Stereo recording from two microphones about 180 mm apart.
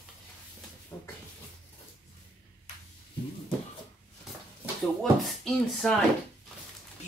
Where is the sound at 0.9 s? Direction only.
20° left (ahead or behind).